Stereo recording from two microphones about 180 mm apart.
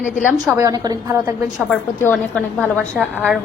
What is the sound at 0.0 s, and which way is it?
Speech, 45° left (ahead or behind).